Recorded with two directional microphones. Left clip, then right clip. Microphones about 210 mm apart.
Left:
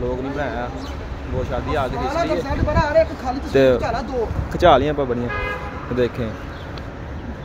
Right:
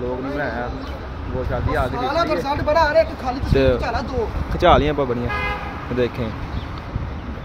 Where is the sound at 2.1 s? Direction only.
45° right (ahead or behind).